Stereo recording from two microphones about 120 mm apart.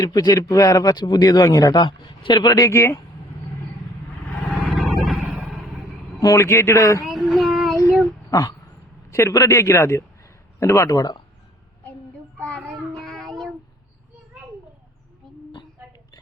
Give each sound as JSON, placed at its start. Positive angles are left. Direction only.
{"t": 0.0, "sound": "speech", "side_deg": 35}
{"t": 4.3, "sound": "vehicle", "side_deg": 10}
{"t": 4.5, "sound": "vehicle", "side_deg": 0}
{"t": 6.1, "sound": "a man's voice", "side_deg": 25}
{"t": 7.0, "sound": "child singing", "side_deg": 0}
{"t": 8.3, "sound": "a man's voice", "side_deg": 30}
{"t": 12.4, "sound": "child singing", "side_deg": 10}